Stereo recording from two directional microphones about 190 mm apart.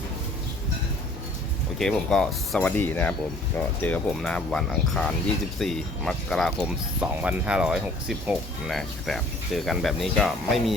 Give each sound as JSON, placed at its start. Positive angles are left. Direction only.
{"t": 1.8, "sound": "speech", "side_deg": 5}